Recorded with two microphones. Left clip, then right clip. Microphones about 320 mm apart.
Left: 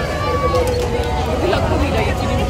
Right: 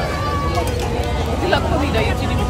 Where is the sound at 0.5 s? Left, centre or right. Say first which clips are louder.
Left 4 dB; centre.